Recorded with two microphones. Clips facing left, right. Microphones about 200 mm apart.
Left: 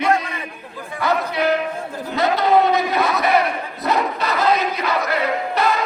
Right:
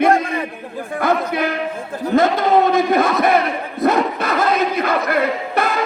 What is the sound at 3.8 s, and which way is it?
Crowd, 50° right (ahead or behind).